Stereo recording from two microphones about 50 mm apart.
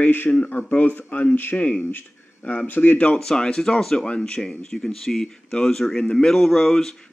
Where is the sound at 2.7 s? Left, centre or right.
Left.